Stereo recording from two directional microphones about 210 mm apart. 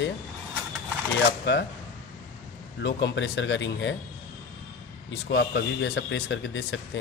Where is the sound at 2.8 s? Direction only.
55° left (ahead or behind).